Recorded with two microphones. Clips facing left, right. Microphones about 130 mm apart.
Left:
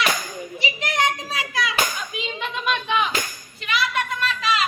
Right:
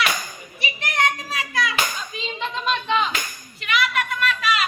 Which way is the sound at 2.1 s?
10° left (ahead or behind).